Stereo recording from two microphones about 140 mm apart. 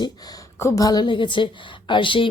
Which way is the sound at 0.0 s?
30° left (ahead or behind).